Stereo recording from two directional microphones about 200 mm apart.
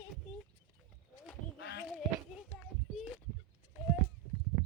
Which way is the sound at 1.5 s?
55° left (ahead or behind).